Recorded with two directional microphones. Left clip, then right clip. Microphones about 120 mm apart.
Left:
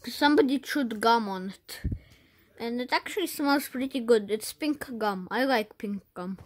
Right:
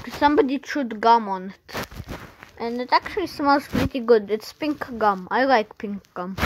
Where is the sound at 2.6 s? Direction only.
25° left (ahead or behind).